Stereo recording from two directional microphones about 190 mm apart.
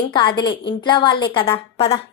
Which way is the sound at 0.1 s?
25° left (ahead or behind).